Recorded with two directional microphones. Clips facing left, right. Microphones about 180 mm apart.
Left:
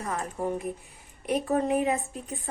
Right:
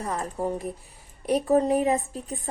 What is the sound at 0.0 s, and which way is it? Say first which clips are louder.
A woman's voice: right 2 dB; 35° right (ahead or behind).